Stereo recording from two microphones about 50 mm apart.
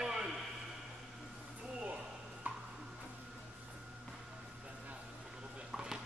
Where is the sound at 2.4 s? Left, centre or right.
Right.